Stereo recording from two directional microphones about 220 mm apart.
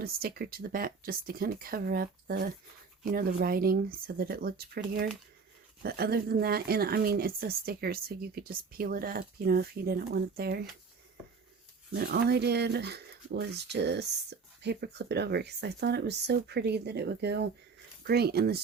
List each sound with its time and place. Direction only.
0.0 s speech: 45° right (ahead or behind)
11.9 s speech: 45° right (ahead or behind)